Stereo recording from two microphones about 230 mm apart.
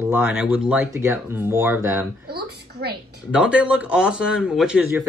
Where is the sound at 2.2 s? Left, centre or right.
Right.